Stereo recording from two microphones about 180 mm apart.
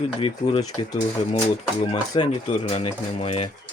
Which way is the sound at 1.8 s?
30° left (ahead or behind).